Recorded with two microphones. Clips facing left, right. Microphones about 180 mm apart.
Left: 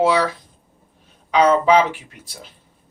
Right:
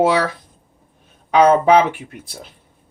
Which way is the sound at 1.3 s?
55° right (ahead or behind).